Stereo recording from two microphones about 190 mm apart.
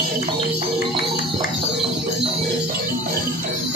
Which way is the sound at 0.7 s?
55° left (ahead or behind).